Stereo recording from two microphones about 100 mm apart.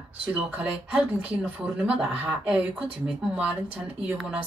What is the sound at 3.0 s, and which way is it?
Speech, 5° right (ahead or behind).